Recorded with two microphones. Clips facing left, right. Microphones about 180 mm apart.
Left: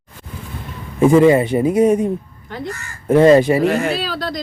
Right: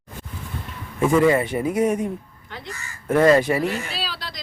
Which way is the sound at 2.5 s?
50° left (ahead or behind).